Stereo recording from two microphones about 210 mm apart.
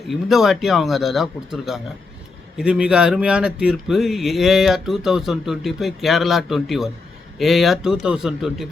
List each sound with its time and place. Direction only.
0.1 s speech: centre (ahead or behind)